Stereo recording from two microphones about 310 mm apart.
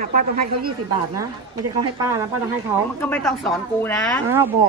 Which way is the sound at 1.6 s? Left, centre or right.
Right.